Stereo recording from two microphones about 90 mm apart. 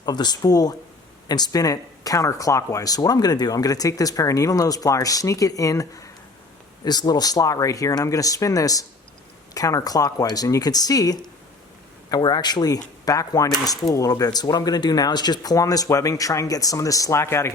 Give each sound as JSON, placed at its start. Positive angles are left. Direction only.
{"t": 0.0, "sound": "speech", "side_deg": 50}